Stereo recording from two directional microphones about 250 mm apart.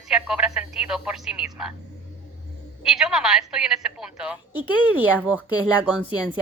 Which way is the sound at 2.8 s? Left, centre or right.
Centre.